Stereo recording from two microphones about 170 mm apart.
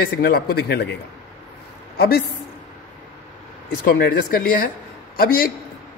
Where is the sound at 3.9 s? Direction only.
60° left (ahead or behind).